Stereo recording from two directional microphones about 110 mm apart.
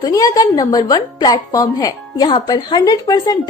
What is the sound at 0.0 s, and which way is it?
A woman's voice, 35° left (ahead or behind).